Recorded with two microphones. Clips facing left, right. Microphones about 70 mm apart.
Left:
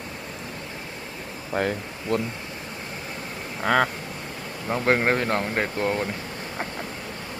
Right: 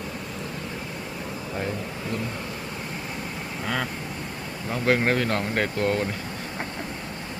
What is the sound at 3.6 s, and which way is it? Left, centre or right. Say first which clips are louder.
Vehicle: left 8 dB; left.